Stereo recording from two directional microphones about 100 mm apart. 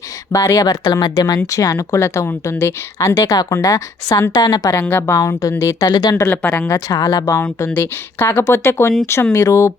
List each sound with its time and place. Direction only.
0.3 s a woman's voice: 30° left (ahead or behind)
3.2 s a woman's voice: 35° left (ahead or behind)
4.7 s speech: 20° left (ahead or behind)
5.9 s speech: 45° left (ahead or behind)
6.3 s speech: 15° left (ahead or behind)
6.7 s a woman's voice: 40° left (ahead or behind)
7.7 s speech: 20° left (ahead or behind)